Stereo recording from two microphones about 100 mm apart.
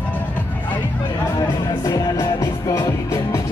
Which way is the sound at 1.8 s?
30° left (ahead or behind).